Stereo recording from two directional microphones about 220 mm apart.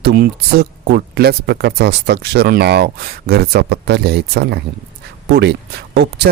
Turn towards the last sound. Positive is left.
turn(degrees=-50)  # may be behind; listen again after turning